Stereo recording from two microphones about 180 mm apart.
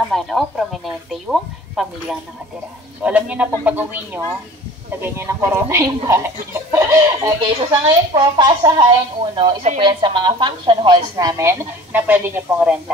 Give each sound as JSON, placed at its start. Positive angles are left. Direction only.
{"t": 0.1, "sound": "a woman's voice", "side_deg": 0}